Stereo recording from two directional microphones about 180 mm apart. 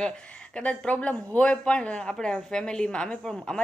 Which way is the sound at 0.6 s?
5° left (ahead or behind).